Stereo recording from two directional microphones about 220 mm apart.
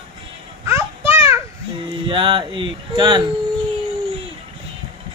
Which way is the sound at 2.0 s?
20° right (ahead or behind).